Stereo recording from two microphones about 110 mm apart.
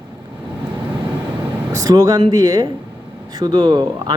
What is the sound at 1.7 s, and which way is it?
Speech, 30° right (ahead or behind).